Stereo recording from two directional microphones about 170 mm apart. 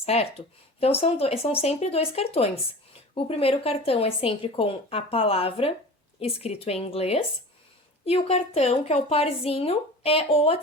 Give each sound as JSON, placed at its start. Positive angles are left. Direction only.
{"t": 0.0, "sound": "a woman's voice", "side_deg": 35}